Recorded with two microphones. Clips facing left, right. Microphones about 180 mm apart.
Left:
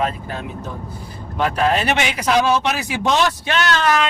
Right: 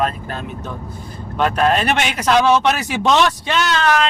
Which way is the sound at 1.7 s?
55° right (ahead or behind).